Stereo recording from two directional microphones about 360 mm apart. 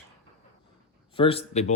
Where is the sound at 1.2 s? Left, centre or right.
Centre.